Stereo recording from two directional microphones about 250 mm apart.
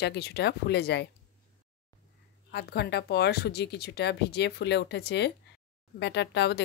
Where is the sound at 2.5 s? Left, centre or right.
Left.